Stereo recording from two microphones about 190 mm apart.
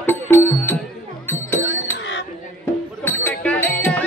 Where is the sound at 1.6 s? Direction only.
85° left.